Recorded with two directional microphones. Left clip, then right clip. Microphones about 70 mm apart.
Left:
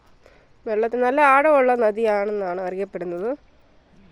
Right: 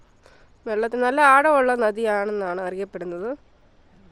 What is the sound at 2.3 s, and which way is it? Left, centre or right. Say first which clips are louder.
Speech: left 1 dB; right.